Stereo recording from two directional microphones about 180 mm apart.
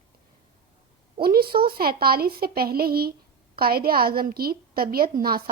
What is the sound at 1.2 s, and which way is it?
A woman's voice, 55° right (ahead or behind).